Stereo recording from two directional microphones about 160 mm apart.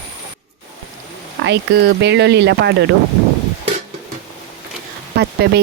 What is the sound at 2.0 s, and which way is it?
Speech, 90° right.